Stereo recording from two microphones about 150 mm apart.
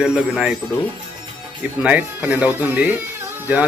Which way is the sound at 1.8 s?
10° right (ahead or behind).